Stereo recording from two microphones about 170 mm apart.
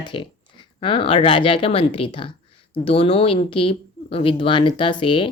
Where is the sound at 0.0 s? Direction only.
30° left (ahead or behind).